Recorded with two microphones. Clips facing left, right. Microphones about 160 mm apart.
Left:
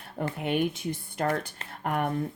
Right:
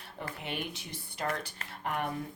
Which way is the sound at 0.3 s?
50° left (ahead or behind).